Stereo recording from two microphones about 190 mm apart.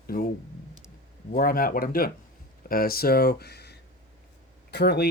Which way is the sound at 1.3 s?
50° left (ahead or behind).